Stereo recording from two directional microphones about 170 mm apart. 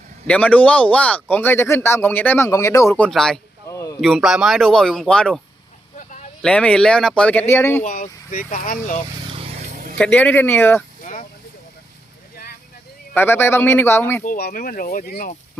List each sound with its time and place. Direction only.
0.3 s speech: 10° left (ahead or behind)
3.7 s a sound: 20° left (ahead or behind)
4.0 s speech: centre (ahead or behind)
6.0 s a sound: 50° left (ahead or behind)
6.4 s speech: 5° left (ahead or behind)
7.9 s speech: 50° left (ahead or behind)
9.2 s vehicle: 35° right (ahead or behind)
10.0 s speech: 10° left (ahead or behind)
11.0 s a sound: 45° left (ahead or behind)
13.1 s speech: 15° left (ahead or behind)
14.3 s speech: 55° left (ahead or behind)